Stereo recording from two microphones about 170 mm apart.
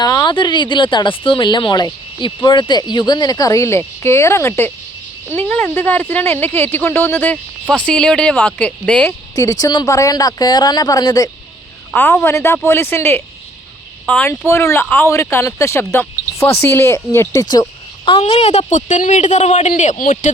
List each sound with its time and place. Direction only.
0.0 s speech: 20° left (ahead or behind)
9.3 s speech: 20° left (ahead or behind); by 20.3 s 50° left (ahead or behind)